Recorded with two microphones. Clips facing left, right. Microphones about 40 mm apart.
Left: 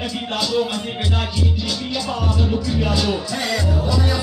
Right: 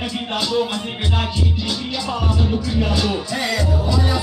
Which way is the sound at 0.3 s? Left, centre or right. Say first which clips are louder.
Even; centre.